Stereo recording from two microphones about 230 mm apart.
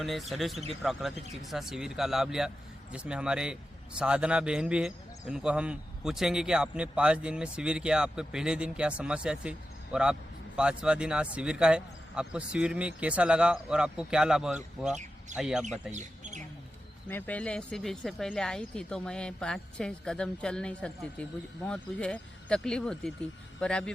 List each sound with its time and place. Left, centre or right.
0.0 s speech: centre
15.9 s bird: right
17.1 s speech: centre